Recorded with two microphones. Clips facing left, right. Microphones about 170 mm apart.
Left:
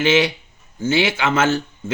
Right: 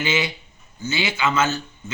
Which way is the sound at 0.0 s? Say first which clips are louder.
Left 7 dB; 90° left.